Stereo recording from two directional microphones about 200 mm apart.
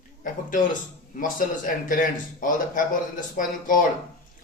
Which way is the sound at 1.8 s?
40° left (ahead or behind).